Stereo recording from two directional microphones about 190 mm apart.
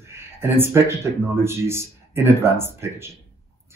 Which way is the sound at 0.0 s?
15° right (ahead or behind).